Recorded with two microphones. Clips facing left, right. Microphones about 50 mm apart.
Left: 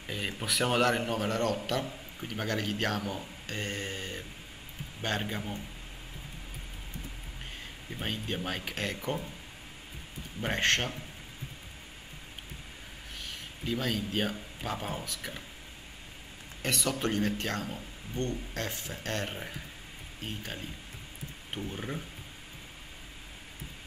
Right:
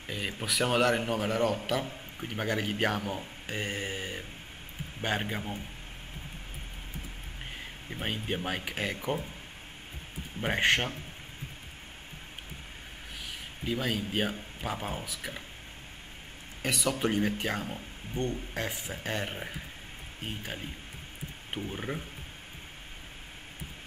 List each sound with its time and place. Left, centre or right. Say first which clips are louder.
0.0 s a man's voice: even; centre
7.9 s a man's voice: right 2 dB; centre
10.4 s a man's voice: right 2 dB; centre
13.2 s speech: right 1 dB; centre
16.6 s a man's voice: right 2 dB; centre